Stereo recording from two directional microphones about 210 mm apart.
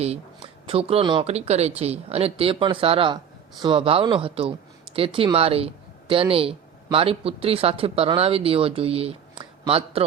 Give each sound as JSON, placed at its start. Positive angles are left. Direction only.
{"t": 0.7, "sound": "speech", "side_deg": -30}